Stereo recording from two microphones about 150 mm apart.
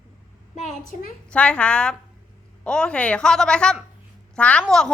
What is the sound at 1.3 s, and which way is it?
A woman's voice, 10° left (ahead or behind).